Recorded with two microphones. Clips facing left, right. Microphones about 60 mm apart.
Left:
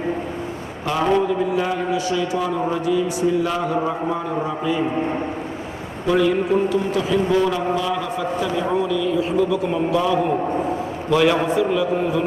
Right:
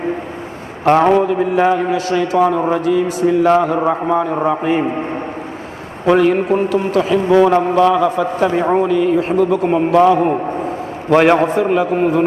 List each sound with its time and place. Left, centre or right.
0.9 s a man's voice: right
6.1 s a man's voice: right